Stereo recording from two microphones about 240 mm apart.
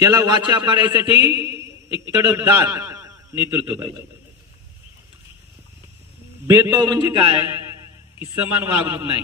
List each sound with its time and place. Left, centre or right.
0.0 s a man's voice: centre
6.4 s a man's voice: centre
8.2 s a man's voice: centre